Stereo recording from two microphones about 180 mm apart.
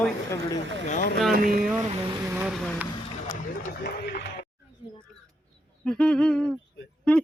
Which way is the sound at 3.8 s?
70° left (ahead or behind).